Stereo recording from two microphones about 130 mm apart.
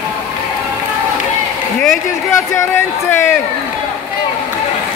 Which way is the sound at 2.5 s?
20° left (ahead or behind).